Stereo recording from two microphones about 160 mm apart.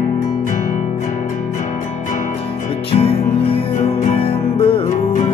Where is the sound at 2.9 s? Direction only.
35° left (ahead or behind).